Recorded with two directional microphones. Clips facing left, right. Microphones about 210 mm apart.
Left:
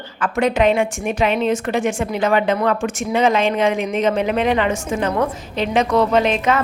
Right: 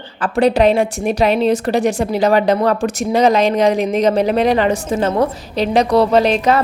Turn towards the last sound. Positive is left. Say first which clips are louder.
# right 4 dB
turn(degrees=-35)  # may be behind; listen again after turning